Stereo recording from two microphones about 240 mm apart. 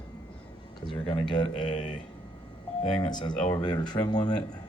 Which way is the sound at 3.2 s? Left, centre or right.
Centre.